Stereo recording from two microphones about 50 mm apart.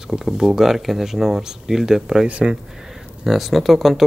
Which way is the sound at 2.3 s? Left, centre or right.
Right.